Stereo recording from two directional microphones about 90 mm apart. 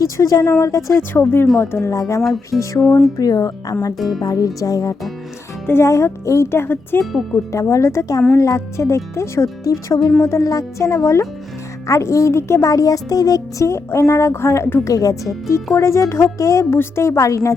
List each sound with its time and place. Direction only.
0.0 s speech: 40° left (ahead or behind)
2.5 s speech: centre (ahead or behind)
3.2 s speech: 45° left (ahead or behind)
3.9 s speech: centre (ahead or behind)
4.2 s speech: 40° left (ahead or behind)
5.6 s speech: 30° left (ahead or behind)
7.0 s speech: centre (ahead or behind)
7.5 s speech: 35° left (ahead or behind)